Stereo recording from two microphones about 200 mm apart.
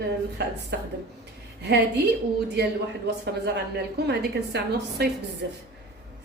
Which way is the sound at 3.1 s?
55° right (ahead or behind).